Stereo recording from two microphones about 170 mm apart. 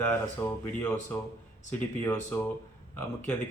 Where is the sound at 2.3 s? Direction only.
10° left (ahead or behind).